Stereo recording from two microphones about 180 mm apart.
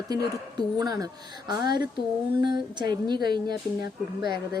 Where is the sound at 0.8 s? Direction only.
20° right (ahead or behind).